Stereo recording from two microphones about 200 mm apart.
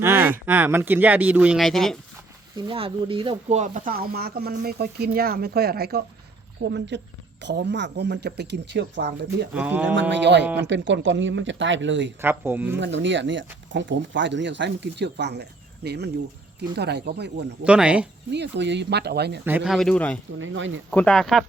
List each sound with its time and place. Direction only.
0.0 s speech: 10° right (ahead or behind)
2.6 s speech: 25° right (ahead or behind); by 9.5 s 55° right (ahead or behind)
9.6 s speech: 5° right (ahead or behind)
9.9 s speech: 60° right (ahead or behind)
12.2 s speech: 10° right (ahead or behind)
12.8 s speech: 65° right (ahead or behind)
17.7 s speech: 5° right (ahead or behind)
18.3 s speech: 60° right (ahead or behind)
19.5 s speech: 5° right (ahead or behind)
20.4 s speech: 70° right (ahead or behind)
20.9 s speech: 5° left (ahead or behind)